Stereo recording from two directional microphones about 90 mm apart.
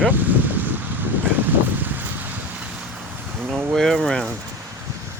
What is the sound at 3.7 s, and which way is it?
Boat, 5° left (ahead or behind).